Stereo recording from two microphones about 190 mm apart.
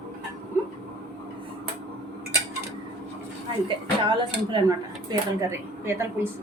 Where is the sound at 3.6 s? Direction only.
25° right (ahead or behind).